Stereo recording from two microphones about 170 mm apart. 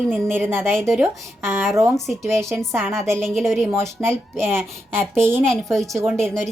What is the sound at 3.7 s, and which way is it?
A woman's voice, 15° right (ahead or behind).